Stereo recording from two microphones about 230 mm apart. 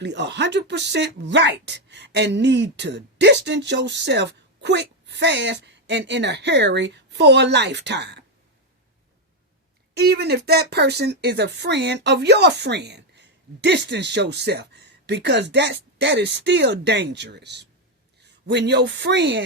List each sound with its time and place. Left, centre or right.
0.0 s speech: right
9.9 s a woman's voice: right